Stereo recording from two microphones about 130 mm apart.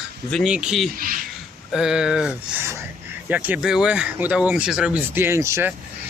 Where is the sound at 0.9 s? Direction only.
90° right.